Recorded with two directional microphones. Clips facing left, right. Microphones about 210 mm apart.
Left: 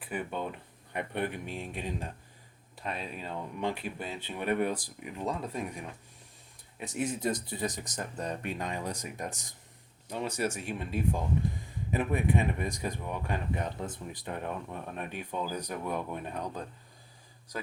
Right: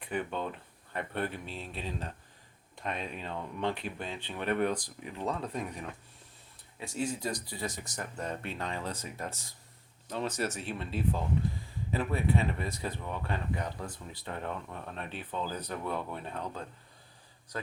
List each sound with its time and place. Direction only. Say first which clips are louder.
0.0 s speech: right 1 dB; 10° left (ahead or behind)
2.7 s speech: right 1 dB; 5° left (ahead or behind)
6.7 s speech: left 1 dB; 20° left (ahead or behind)